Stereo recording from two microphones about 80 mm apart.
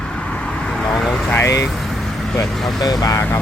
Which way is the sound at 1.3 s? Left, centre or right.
Left.